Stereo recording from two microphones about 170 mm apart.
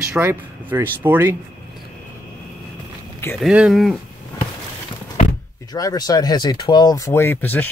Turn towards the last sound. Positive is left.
turn(degrees=10)  # may be behind; listen again after turning